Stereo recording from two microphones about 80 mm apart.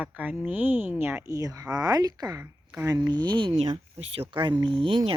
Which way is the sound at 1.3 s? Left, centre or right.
Right.